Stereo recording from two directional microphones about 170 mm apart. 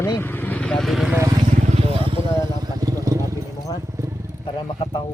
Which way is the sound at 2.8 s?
20° right (ahead or behind).